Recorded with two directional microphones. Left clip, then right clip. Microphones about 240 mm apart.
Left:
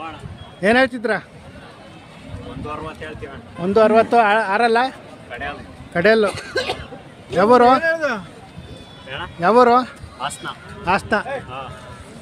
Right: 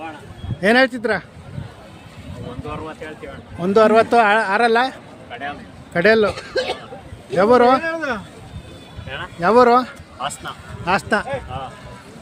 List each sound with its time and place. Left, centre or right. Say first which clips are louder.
0.6 s speech: right 1 dB; centre
2.6 s a sound: left 1 dB; left
3.6 s speech: right 1 dB; centre
5.3 s speech: even; left
5.9 s speech: even; centre
7.3 s speech: left 1 dB; centre
7.8 s speech: left 3 dB; left
9.0 s speech: even; centre